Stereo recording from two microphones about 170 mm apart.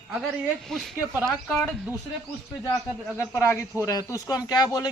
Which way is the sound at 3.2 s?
15° left (ahead or behind).